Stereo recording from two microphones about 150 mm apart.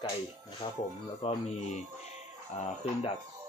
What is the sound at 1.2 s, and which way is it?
Speech, 40° left (ahead or behind).